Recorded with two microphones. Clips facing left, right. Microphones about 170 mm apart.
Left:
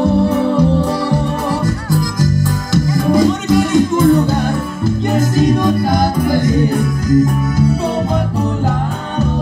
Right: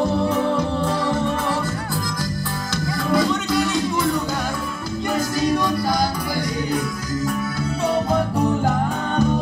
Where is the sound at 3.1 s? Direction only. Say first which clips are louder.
Left 7 dB; 45° left (ahead or behind).